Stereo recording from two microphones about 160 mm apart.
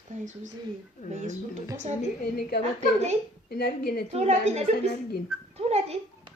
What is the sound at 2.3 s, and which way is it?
A woman's voice, 80° left.